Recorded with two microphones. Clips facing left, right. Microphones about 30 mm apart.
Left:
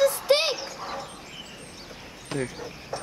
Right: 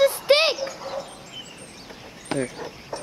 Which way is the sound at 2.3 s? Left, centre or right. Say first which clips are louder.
Right 4 dB; right.